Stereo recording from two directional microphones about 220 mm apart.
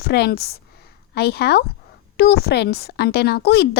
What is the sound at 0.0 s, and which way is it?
A woman's voice, 45° left (ahead or behind).